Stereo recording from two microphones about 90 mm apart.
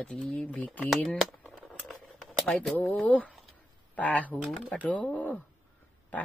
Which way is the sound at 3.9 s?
15° left (ahead or behind).